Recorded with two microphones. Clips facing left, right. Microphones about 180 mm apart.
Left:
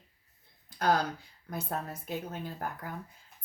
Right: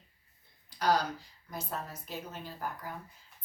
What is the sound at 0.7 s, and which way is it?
A woman's voice, 50° left (ahead or behind).